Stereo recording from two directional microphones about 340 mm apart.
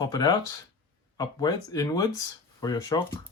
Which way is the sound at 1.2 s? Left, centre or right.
Centre.